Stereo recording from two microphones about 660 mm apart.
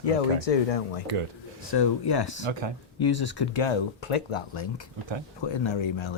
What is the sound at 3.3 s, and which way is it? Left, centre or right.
Speech, left.